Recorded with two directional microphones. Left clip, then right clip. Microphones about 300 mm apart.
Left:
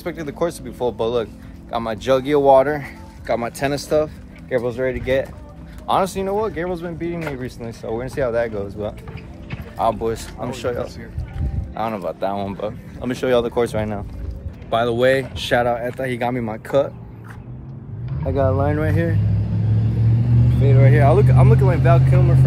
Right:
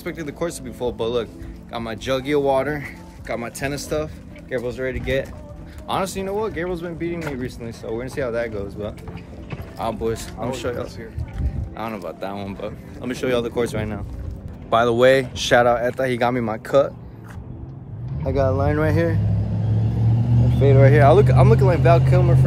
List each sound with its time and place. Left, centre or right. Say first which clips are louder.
0.0 s speech: left 4 dB; centre
18.2 s speech: left 1 dB; centre
19.2 s vehicle: left 1 dB; right
20.6 s speech: right 3 dB; centre